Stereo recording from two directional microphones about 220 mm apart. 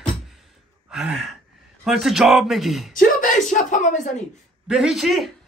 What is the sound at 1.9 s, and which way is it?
Speech, centre (ahead or behind).